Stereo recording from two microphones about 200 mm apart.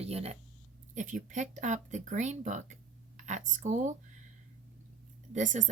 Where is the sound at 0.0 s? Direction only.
30° right (ahead or behind).